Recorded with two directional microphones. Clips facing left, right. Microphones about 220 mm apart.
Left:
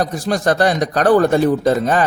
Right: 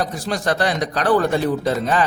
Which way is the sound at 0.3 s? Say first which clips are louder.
Left 6 dB; 45° left (ahead or behind).